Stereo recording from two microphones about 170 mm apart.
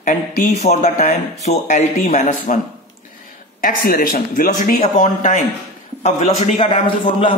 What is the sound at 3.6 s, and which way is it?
A man's voice, 60° left (ahead or behind).